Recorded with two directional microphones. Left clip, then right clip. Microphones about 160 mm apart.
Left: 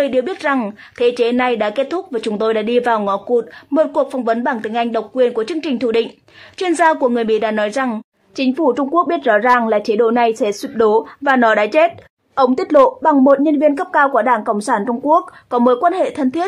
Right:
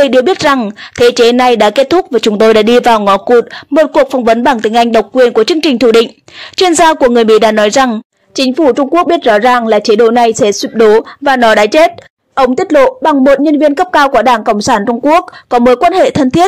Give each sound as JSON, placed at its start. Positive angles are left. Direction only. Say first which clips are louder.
{"t": 0.0, "sound": "speech", "louder": "right 9 dB", "side_deg": -40}
{"t": 7.9, "sound": "speech", "louder": "right 8 dB", "side_deg": -25}